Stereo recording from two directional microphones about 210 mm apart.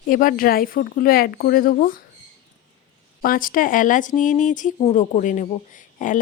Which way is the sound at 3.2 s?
40° left (ahead or behind).